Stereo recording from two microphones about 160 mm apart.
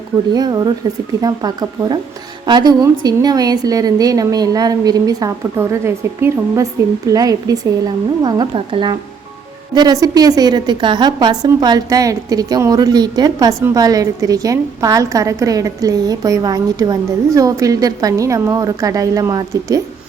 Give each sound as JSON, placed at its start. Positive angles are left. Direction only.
{"t": 0.3, "sound": "a woman's voice", "side_deg": -25}